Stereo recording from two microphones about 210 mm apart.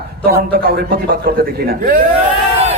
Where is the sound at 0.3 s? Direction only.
45° right (ahead or behind).